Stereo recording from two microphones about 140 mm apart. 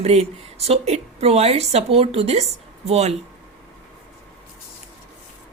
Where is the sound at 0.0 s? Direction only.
50° right (ahead or behind).